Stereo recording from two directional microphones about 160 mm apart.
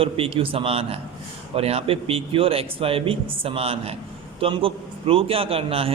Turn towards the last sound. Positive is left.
turn(degrees=-35)  # may be behind; listen again after turning